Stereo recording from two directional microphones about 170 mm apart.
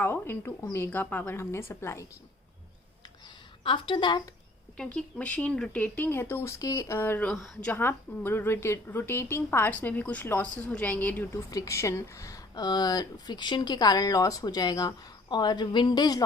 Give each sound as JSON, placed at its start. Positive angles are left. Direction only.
{"t": 0.0, "sound": "speech", "side_deg": 15}
{"t": 3.6, "sound": "a woman's voice", "side_deg": 30}
{"t": 4.8, "sound": "speech", "side_deg": 5}